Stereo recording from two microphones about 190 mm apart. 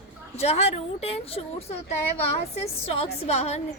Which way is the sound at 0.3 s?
35° left (ahead or behind).